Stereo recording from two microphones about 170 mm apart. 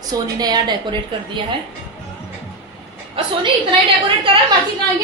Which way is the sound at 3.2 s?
35° right (ahead or behind).